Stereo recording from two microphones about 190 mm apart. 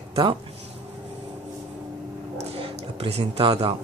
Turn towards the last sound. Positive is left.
turn(degrees=-30)  # may be behind; listen again after turning